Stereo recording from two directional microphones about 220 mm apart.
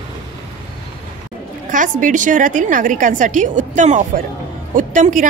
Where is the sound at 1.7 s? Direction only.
35° right (ahead or behind).